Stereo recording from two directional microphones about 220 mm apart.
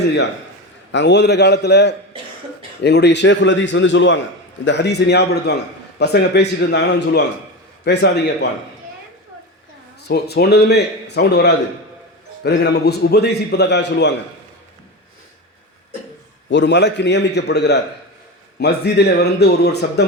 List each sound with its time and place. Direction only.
0.9 s a man's voice: 50° left (ahead or behind)
10.1 s a man's voice: 45° left (ahead or behind)
16.5 s a man's voice: 55° left (ahead or behind)